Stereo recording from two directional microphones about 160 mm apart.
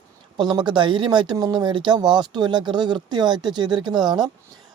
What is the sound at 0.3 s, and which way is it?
Speech, 30° right (ahead or behind).